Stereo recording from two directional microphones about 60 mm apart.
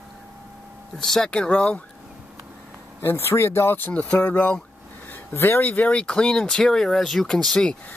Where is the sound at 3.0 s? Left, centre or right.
Left.